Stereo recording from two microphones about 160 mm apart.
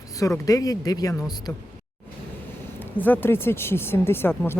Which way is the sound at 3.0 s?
10° left (ahead or behind).